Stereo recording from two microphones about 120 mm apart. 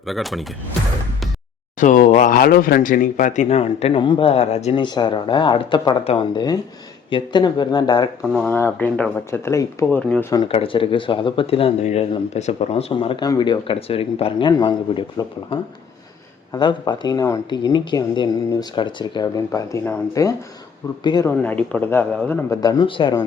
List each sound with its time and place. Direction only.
0.1 s speech: centre (ahead or behind)
1.8 s speech: 90° left; by 4.7 s 65° left (ahead or behind)
4.7 s speech: 40° left (ahead or behind)
8.2 s speech: 5° left (ahead or behind)
8.4 s speech: 20° left (ahead or behind)
10.5 s speech: 50° left (ahead or behind)
12.9 s speech: 45° left (ahead or behind)
14.5 s speech: 35° left (ahead or behind)
19.4 s speech: 25° left (ahead or behind)
21.0 s speech: 40° left (ahead or behind)
21.2 s a man's voice: 10° left (ahead or behind)
22.6 s speech: 35° left (ahead or behind)